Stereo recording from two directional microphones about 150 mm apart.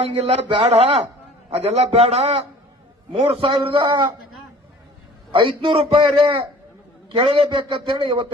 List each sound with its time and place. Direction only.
0.0 s a man's voice: 40° right (ahead or behind)
5.3 s a man's voice: 35° right (ahead or behind)